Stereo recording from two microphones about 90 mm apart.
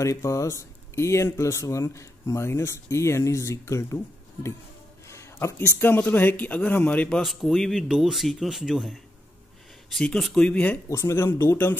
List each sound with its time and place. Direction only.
0.0 s speech: 35° left (ahead or behind)
5.0 s a sound: 30° left (ahead or behind)
5.8 s speech: 20° left (ahead or behind)
7.2 s speech: centre (ahead or behind)
10.9 s speech: 35° left (ahead or behind)